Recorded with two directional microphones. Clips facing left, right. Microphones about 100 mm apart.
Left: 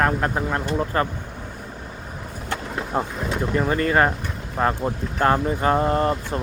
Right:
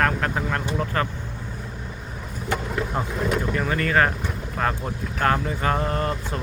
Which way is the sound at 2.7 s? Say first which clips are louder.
Left 1 dB; 25° left (ahead or behind).